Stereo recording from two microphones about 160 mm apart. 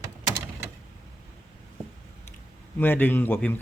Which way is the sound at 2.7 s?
10° left (ahead or behind).